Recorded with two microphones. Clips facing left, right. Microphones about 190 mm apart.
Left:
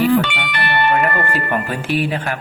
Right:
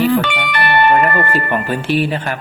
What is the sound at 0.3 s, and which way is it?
Music, 45° right (ahead or behind).